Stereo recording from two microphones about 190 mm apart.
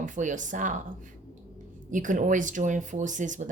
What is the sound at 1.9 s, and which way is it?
Speech, 40° right (ahead or behind).